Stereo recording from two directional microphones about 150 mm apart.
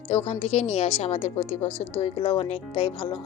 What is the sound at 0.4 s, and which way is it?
A woman's voice, 45° left (ahead or behind).